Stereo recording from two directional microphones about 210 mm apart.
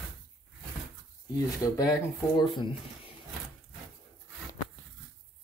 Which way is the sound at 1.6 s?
15° left (ahead or behind).